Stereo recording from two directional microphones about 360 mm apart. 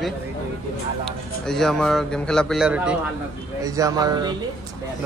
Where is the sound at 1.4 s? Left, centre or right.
Centre.